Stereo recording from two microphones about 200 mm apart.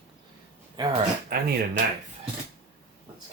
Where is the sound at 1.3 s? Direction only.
50° right (ahead or behind).